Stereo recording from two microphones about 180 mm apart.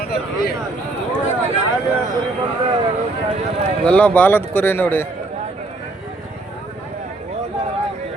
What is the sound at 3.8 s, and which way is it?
Speech, 5° left (ahead or behind).